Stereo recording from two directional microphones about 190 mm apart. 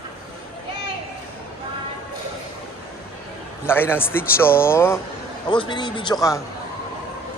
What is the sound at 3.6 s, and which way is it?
A man's voice, 10° left (ahead or behind).